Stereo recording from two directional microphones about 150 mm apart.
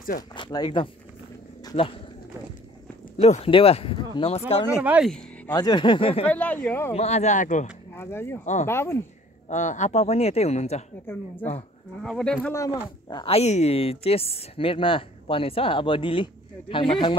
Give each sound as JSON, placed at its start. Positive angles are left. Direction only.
{"t": 0.3, "sound": "a woman's voice", "side_deg": 30}
{"t": 3.2, "sound": "a woman's voice", "side_deg": 40}
{"t": 4.8, "sound": "speech", "side_deg": -10}
{"t": 5.5, "sound": "a woman's voice", "side_deg": 25}
{"t": 6.2, "sound": "speech", "side_deg": 10}
{"t": 6.9, "sound": "speech", "side_deg": 45}
{"t": 7.9, "sound": "speech", "side_deg": 15}
{"t": 9.5, "sound": "speech", "side_deg": 55}
{"t": 11.1, "sound": "speech", "side_deg": 15}
{"t": 12.0, "sound": "speech", "side_deg": 5}
{"t": 13.1, "sound": "a woman's voice", "side_deg": 40}